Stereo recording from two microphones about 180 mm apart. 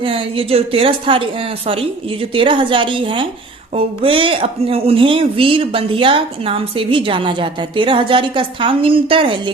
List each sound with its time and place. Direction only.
0.0 s speech: 30° right (ahead or behind)